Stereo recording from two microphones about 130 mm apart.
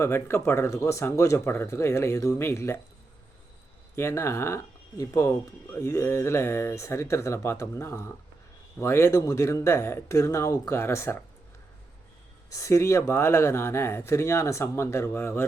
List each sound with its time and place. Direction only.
0.0 s speech: 20° left (ahead or behind)
3.9 s speech: 20° left (ahead or behind)
12.5 s speech: 25° left (ahead or behind)